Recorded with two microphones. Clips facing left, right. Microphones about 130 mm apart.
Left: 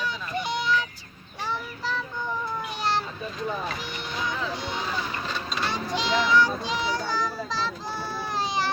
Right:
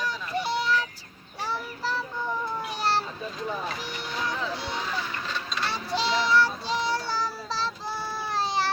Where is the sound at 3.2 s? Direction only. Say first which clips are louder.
Left 1 dB; 5° right (ahead or behind).